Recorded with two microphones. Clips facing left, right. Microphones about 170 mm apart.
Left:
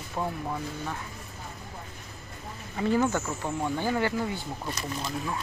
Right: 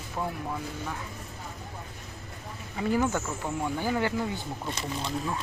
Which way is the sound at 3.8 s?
15° right (ahead or behind).